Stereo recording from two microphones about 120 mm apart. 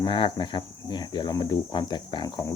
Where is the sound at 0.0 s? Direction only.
40° left (ahead or behind).